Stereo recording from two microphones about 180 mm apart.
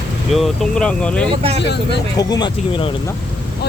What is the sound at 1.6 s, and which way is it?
Speech, 70° left (ahead or behind).